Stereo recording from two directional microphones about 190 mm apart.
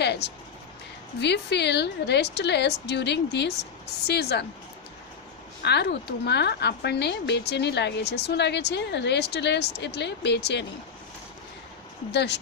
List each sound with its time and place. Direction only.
0.0 s music: 60° left (ahead or behind)
1.2 s a woman's voice: 65° left (ahead or behind)
5.6 s a woman's voice: 60° left (ahead or behind)
12.1 s a woman's voice: 60° left (ahead or behind)